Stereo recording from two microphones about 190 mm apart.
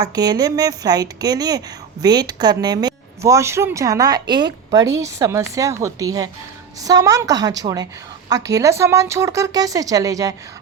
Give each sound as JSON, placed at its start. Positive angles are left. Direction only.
{"t": 0.0, "sound": "a woman's voice", "side_deg": -20}